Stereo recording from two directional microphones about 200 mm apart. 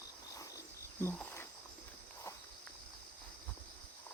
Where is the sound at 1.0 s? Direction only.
10° left (ahead or behind).